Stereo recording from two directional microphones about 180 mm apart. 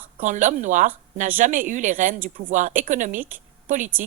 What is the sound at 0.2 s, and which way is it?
Speech, 45° right (ahead or behind).